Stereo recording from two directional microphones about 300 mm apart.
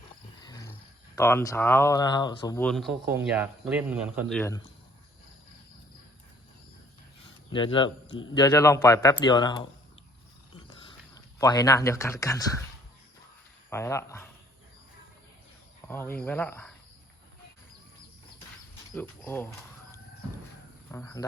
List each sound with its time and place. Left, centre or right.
0.4 s speech: centre
7.5 s speech: centre
10.8 s speech: centre
13.7 s speech: centre
15.9 s speech: centre
18.9 s speech: centre
20.9 s speech: centre